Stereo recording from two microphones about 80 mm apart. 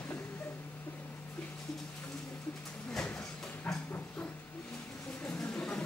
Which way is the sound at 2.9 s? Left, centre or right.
Centre.